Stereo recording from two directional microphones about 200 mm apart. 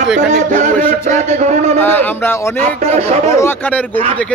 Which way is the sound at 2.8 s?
30° right (ahead or behind).